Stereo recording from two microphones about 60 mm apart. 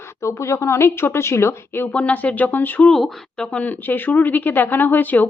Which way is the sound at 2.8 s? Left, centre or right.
Centre.